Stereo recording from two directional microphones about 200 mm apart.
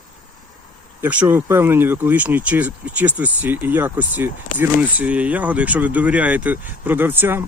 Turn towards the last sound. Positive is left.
turn(degrees=-10)  # may be behind; listen again after turning